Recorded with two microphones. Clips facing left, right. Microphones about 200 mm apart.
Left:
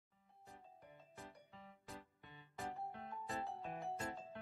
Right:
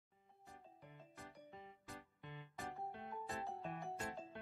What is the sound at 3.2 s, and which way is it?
Music, centre (ahead or behind).